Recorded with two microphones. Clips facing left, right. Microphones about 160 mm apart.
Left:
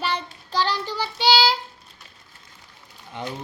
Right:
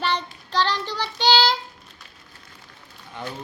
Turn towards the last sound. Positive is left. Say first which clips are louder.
# left 2 dB
turn(degrees=20)  # may be behind; listen again after turning